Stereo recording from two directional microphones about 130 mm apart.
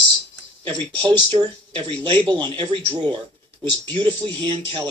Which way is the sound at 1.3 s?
35° right (ahead or behind).